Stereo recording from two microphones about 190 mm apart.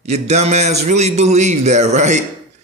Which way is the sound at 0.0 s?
35° right (ahead or behind).